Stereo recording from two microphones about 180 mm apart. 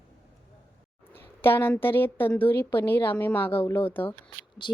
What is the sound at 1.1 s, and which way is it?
A woman's voice, 10° left (ahead or behind).